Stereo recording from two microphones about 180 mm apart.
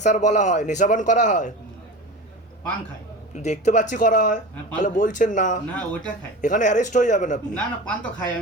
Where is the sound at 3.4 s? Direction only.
40° left (ahead or behind).